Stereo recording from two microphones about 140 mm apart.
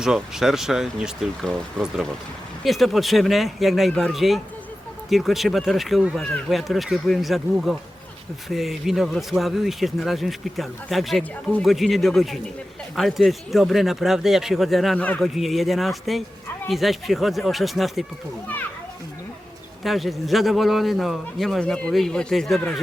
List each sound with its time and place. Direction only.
0.0 s a man's voice: 5° right (ahead or behind)
19.8 s a man's voice: centre (ahead or behind)